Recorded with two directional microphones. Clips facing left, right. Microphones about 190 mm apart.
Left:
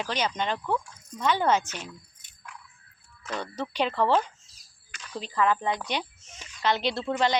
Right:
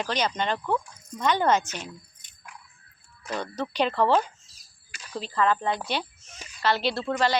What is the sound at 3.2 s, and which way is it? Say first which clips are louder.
Speech: right 2 dB; 10° right (ahead or behind).